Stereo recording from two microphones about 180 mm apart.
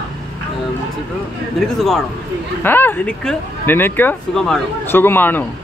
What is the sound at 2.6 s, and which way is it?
Speech, 10° left (ahead or behind).